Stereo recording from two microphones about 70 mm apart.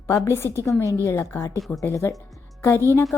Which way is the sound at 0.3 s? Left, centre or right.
Left.